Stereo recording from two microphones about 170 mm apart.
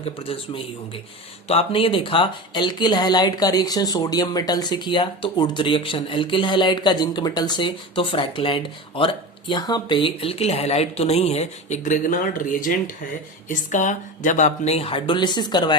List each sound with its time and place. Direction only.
0.0 s speech: 35° left (ahead or behind)